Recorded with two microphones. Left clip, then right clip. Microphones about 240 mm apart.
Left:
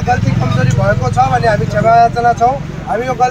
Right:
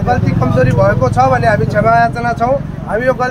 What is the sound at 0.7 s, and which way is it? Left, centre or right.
Speech, centre.